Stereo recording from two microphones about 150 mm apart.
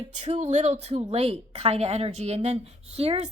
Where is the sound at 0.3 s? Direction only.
45° right (ahead or behind).